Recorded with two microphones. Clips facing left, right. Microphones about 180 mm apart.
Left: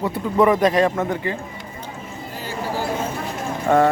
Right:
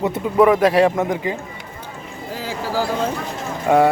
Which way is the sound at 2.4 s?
90° right.